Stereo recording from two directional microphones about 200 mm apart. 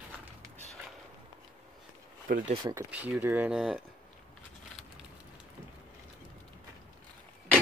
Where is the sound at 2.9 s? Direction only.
10° right (ahead or behind).